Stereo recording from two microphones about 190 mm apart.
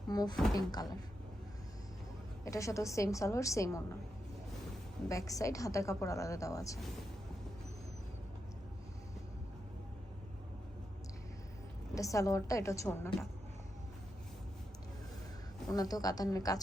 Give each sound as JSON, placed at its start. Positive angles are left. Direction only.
{"t": 0.1, "sound": "a woman's voice", "side_deg": 20}
{"t": 2.4, "sound": "a woman's voice", "side_deg": 15}
{"t": 5.0, "sound": "a woman's voice", "side_deg": 15}
{"t": 11.9, "sound": "a woman's voice", "side_deg": 15}
{"t": 15.7, "sound": "a woman's voice", "side_deg": 20}